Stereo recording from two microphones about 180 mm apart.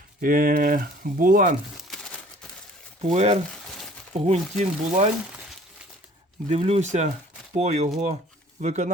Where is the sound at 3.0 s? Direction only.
40° right (ahead or behind).